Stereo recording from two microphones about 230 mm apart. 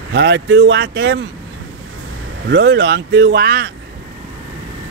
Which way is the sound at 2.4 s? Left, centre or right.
Right.